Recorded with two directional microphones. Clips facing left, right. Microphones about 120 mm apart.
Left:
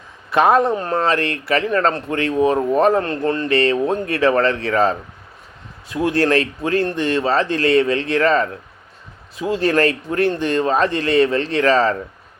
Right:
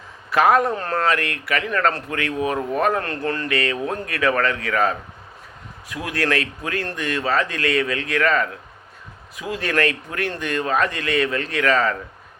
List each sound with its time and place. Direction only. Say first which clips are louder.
0.3 s speech: left 2 dB; 25° left (ahead or behind)